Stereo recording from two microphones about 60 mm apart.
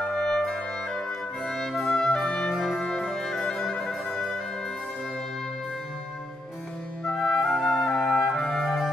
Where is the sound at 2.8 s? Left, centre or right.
Centre.